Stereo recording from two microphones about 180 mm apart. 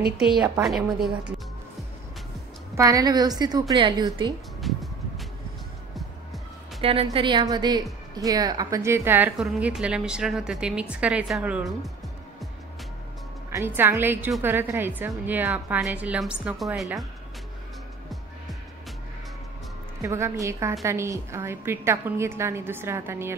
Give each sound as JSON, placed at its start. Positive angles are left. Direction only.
{"t": 0.2, "sound": "a woman's voice", "side_deg": 0}
{"t": 2.8, "sound": "a woman's voice", "side_deg": -20}
{"t": 4.7, "sound": "music", "side_deg": 0}
{"t": 6.8, "sound": "a woman's voice", "side_deg": -30}
{"t": 13.5, "sound": "a woman's voice", "side_deg": -15}
{"t": 20.0, "sound": "a woman's voice", "side_deg": -15}